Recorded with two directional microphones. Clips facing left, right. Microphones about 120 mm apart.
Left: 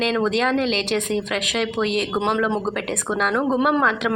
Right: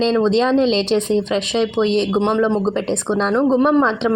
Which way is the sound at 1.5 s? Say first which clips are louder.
Right 5 dB; 30° right (ahead or behind).